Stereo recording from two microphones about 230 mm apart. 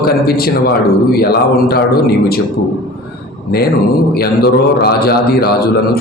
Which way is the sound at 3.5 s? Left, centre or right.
Left.